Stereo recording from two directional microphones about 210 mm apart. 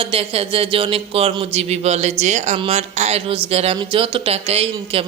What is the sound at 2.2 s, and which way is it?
A man's voice, 35° right (ahead or behind).